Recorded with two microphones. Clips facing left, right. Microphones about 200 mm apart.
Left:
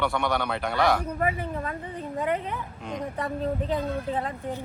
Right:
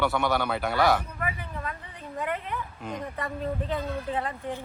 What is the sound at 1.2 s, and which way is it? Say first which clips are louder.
Speech: left 6 dB; 35° left (ahead or behind).